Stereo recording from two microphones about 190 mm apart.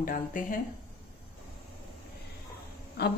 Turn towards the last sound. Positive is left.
turn(degrees=55)  # may be behind; listen again after turning